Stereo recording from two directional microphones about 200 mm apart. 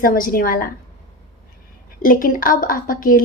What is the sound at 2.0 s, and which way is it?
A woman's voice, 45° left (ahead or behind).